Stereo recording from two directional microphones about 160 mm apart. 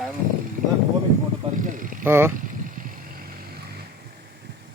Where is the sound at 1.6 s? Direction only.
55° right (ahead or behind).